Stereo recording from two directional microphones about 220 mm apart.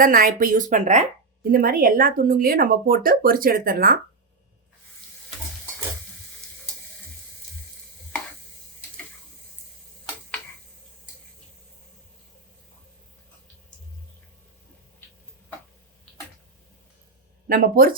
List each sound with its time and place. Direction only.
0.0 s speech: 40° right (ahead or behind)
17.5 s speech: 40° right (ahead or behind)